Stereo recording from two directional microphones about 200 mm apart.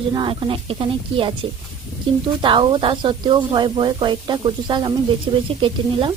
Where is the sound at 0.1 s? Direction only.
25° right (ahead or behind).